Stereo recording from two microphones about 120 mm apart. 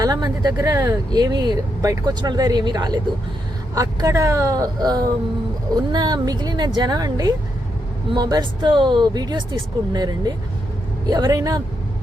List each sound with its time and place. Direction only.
0.0 s speech: 35° right (ahead or behind)